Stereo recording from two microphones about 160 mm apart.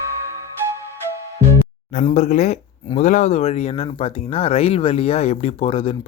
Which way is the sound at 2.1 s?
45° left (ahead or behind).